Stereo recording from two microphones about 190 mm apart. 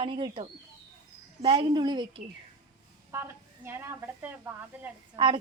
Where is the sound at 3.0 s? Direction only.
10° right (ahead or behind).